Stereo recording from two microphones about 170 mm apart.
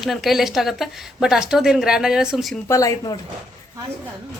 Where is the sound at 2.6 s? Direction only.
20° left (ahead or behind).